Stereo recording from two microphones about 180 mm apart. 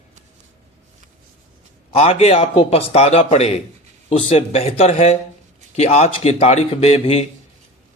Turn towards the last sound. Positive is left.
turn(degrees=35)  # may be behind; listen again after turning